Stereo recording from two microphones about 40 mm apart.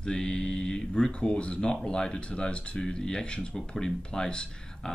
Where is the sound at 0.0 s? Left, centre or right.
Centre.